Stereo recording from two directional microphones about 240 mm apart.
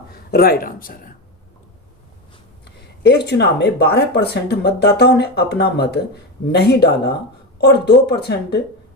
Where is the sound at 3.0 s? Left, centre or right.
Left.